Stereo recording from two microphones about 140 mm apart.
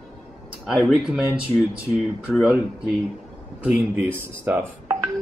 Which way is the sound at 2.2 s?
5° right (ahead or behind).